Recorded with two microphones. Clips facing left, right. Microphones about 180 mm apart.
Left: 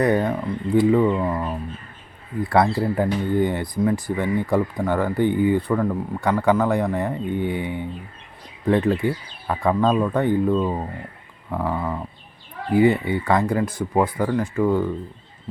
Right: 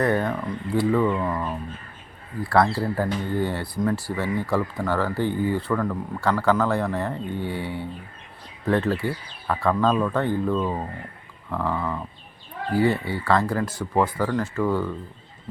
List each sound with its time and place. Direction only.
0.0 s speech: 15° left (ahead or behind)
11.5 s speech: 15° left (ahead or behind)